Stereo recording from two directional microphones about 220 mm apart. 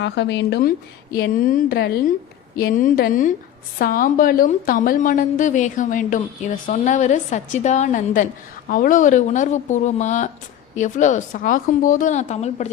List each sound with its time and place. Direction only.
0.0 s speech: 55° left (ahead or behind)
1.2 s a woman's voice: 40° left (ahead or behind)